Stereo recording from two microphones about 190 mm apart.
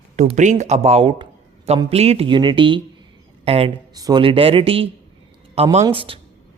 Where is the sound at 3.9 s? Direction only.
20° right (ahead or behind).